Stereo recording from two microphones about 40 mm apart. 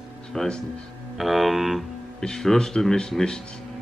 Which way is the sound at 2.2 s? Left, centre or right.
Centre.